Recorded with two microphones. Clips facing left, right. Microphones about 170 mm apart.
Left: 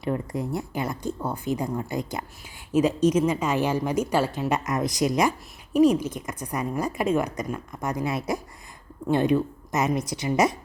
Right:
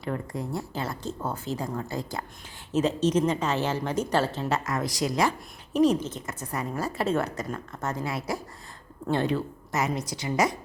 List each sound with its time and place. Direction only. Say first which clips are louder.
0.0 s a woman's voice: left 4 dB; 20° left (ahead or behind)